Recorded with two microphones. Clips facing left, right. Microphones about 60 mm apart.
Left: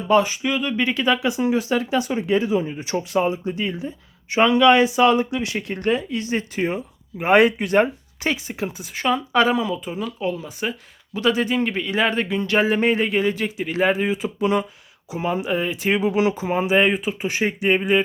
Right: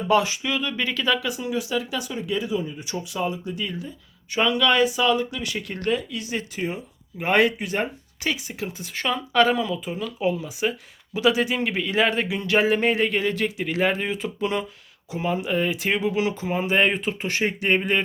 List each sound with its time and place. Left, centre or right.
0.1 s speech: centre
1.4 s speech: left
7.2 s speech: left
7.6 s speech: left
8.2 s speech: left
8.8 s speech: centre
10.2 s speech: centre
16.0 s speech: left
16.6 s speech: centre